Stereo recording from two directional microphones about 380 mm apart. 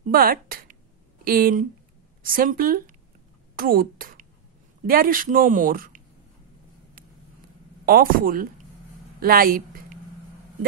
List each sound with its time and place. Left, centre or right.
0.0 s a sound: right
1.2 s a woman's voice: right
7.8 s a woman's voice: right